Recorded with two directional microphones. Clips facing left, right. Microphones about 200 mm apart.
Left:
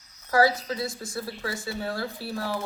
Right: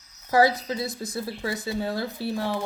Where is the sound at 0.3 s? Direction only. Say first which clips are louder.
Right 2 dB; 20° right (ahead or behind).